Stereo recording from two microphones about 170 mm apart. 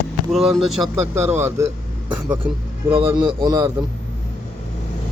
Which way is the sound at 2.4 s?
30° right (ahead or behind).